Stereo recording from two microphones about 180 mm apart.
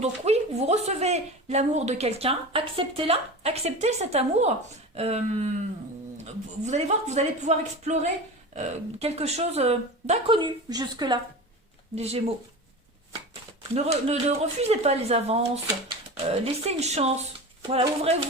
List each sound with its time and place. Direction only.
0.0 s a woman's voice: 35° right (ahead or behind)
11.9 s a woman's voice: 35° right (ahead or behind)
13.7 s a woman's voice: 35° right (ahead or behind)